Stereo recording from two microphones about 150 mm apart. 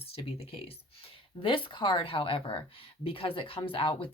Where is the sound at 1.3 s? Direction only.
35° left (ahead or behind).